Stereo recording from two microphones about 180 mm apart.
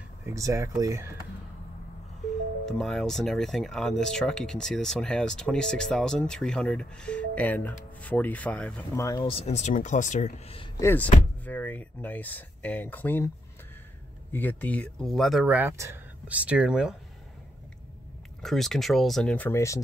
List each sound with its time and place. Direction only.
0.2 s speech: 15° right (ahead or behind)
2.6 s speech: centre (ahead or behind)
9.0 s speech: 20° left (ahead or behind)
9.3 s speech: 35° left (ahead or behind)
10.8 s speech: 10° left (ahead or behind)
14.3 s speech: 10° left (ahead or behind)
18.4 s speech: centre (ahead or behind)